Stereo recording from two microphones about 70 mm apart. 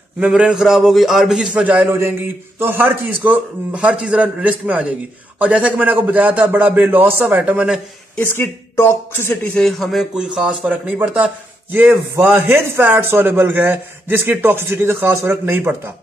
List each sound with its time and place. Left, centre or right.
0.3 s a man's voice: centre
1.6 s a man's voice: right
8.2 s speech: left
9.4 s speech: centre
10.1 s a man's voice: centre; by 15.9 s right